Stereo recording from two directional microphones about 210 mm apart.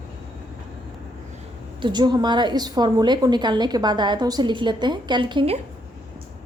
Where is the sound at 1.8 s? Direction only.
20° right (ahead or behind).